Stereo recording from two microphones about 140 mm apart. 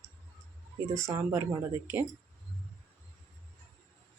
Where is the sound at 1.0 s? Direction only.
20° right (ahead or behind).